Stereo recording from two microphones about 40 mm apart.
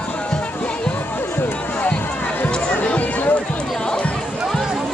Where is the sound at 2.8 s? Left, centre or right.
Left.